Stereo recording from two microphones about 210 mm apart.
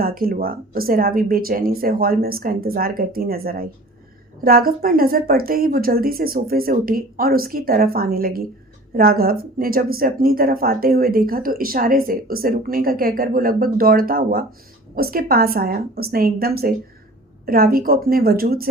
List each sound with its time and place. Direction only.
0.0 s speech: 45° right (ahead or behind)